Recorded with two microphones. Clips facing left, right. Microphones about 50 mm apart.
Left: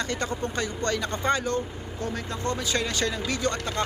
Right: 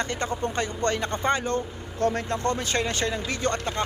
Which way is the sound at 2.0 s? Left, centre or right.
Right.